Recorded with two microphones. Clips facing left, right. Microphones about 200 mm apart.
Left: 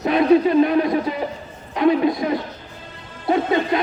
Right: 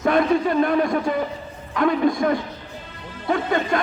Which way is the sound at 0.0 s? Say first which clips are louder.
Left 3 dB; 50° right (ahead or behind).